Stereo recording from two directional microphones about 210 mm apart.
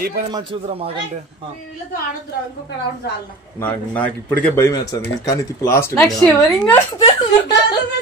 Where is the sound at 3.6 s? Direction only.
5° left (ahead or behind).